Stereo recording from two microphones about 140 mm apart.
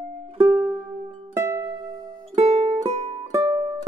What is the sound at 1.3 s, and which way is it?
Music, 20° right (ahead or behind).